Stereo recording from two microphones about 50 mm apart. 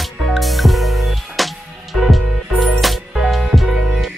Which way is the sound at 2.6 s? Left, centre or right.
Centre.